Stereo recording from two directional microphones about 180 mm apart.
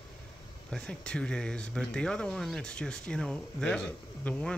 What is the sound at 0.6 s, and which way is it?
Speech, 5° left (ahead or behind).